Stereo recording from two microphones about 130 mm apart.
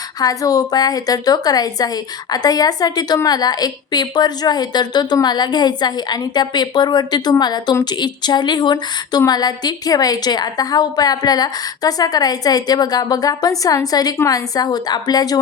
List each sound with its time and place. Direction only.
0.2 s a woman's voice: 30° left (ahead or behind)